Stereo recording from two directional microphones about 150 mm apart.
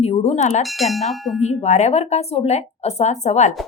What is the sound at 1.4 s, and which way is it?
A woman's voice, 50° left (ahead or behind).